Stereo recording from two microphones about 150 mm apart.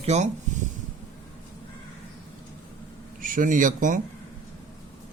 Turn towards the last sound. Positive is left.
turn(degrees=-60)  # may be behind; listen again after turning